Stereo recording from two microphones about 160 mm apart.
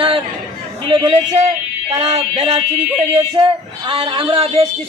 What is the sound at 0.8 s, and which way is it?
A man's voice, 30° right (ahead or behind).